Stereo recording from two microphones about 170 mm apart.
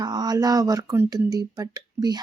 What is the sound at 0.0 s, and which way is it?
Speech, 25° right (ahead or behind).